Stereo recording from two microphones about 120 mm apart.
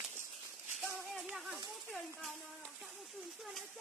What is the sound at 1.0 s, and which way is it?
Speech, 5° left (ahead or behind).